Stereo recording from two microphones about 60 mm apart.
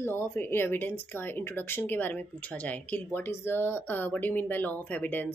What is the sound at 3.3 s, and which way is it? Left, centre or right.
Speech, left.